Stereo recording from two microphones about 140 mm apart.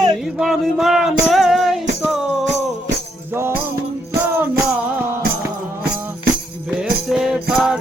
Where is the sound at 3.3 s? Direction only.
15° right (ahead or behind).